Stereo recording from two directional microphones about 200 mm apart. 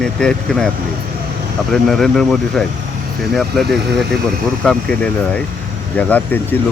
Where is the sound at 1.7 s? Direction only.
Centre (ahead or behind).